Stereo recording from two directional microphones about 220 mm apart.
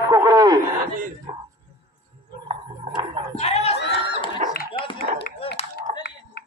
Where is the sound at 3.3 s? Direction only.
30° left (ahead or behind).